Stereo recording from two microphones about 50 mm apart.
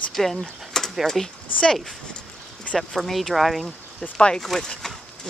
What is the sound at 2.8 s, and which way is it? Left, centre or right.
Speech, centre.